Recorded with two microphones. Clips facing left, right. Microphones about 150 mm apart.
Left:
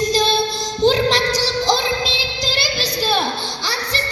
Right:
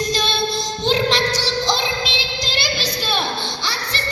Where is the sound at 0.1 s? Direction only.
35° left (ahead or behind).